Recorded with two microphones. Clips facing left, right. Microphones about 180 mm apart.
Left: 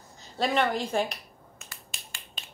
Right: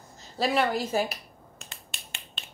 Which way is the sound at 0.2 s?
5° right (ahead or behind).